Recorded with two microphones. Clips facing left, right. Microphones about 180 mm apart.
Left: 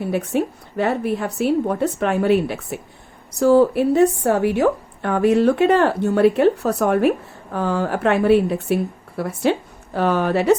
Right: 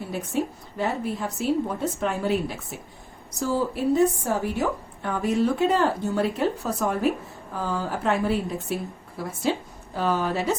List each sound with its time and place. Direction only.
0.0 s a woman's voice: 65° left (ahead or behind)